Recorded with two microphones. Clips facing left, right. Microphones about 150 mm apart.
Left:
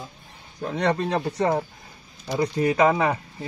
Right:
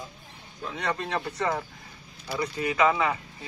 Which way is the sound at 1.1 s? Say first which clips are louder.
Left 6 dB; 35° left (ahead or behind).